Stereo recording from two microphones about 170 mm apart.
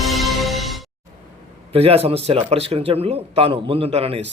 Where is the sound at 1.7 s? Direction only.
35° right (ahead or behind).